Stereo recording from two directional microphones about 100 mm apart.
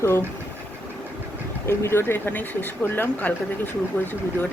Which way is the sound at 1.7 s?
25° left (ahead or behind).